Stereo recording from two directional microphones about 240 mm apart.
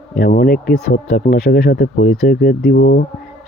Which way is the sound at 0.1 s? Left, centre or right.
Left.